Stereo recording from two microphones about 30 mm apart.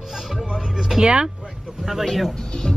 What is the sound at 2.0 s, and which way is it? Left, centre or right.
Speech, centre.